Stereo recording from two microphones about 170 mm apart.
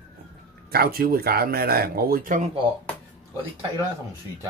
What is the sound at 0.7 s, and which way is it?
Speech, 65° right (ahead or behind).